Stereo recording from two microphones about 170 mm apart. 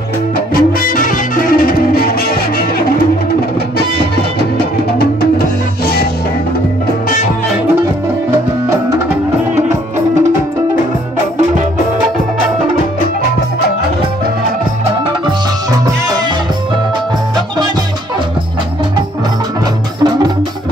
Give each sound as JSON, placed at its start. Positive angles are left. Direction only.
{"t": 0.6, "sound": "music", "side_deg": 55}
{"t": 20.0, "sound": "music", "side_deg": -25}